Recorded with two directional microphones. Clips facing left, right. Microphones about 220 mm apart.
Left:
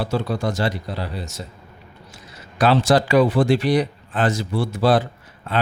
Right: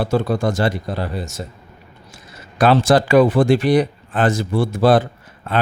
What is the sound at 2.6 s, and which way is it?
A man's voice, 50° right (ahead or behind).